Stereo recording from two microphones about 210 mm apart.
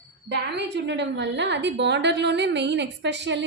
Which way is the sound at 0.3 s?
55° right (ahead or behind).